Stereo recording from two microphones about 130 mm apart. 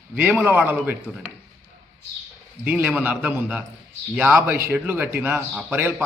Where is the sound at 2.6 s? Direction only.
10° right (ahead or behind).